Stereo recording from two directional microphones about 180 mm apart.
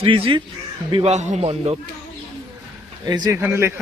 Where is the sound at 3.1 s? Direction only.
20° right (ahead or behind).